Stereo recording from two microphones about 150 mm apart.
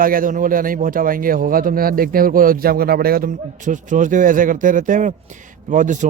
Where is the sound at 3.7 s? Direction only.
60° right (ahead or behind).